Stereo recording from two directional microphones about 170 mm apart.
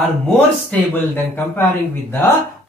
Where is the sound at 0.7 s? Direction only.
10° left (ahead or behind).